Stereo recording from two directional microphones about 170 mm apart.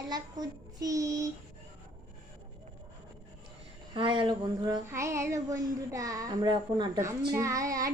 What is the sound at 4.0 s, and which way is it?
Speech, 30° right (ahead or behind).